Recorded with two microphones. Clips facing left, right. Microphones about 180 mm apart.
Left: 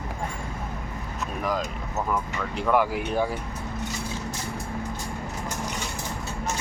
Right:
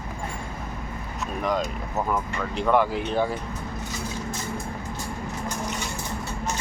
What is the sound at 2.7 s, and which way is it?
Speech, 10° left (ahead or behind).